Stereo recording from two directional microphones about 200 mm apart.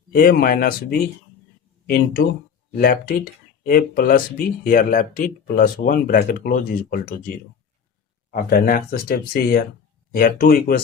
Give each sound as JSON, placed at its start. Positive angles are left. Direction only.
{"t": 0.1, "sound": "speech", "side_deg": 50}
{"t": 2.7, "sound": "speech", "side_deg": 45}